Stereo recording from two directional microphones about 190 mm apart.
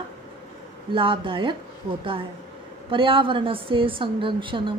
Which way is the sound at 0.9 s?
25° right (ahead or behind).